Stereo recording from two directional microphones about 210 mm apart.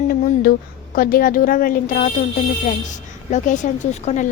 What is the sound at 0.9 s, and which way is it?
A woman's voice, 45° left (ahead or behind).